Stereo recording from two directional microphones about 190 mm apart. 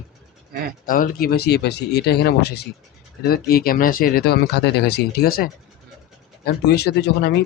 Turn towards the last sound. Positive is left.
turn(degrees=60)  # may be behind; listen again after turning